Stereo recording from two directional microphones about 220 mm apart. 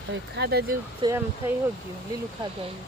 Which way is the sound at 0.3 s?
45° right (ahead or behind).